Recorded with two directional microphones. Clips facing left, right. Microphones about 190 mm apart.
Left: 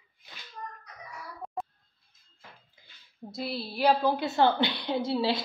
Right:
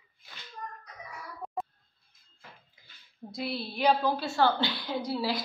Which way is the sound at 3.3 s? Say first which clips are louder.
Even; centre (ahead or behind).